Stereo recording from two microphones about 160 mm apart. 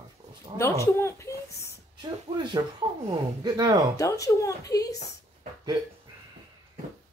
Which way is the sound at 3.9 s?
20° left (ahead or behind).